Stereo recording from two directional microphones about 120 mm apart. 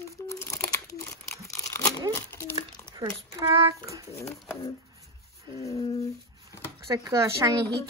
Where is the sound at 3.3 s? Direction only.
25° right (ahead or behind).